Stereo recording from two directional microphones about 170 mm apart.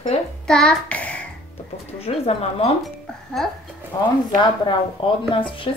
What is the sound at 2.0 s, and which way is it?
Speech, 35° left (ahead or behind).